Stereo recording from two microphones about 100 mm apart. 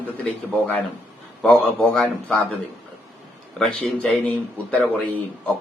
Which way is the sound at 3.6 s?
10° left (ahead or behind).